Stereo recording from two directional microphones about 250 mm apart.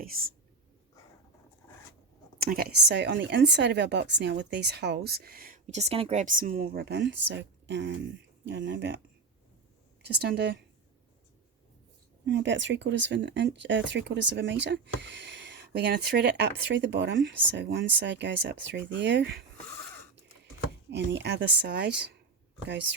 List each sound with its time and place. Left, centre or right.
0.0 s a woman's voice: right
2.4 s a woman's voice: right
10.1 s a woman's voice: right
12.2 s speech: right
20.9 s speech: right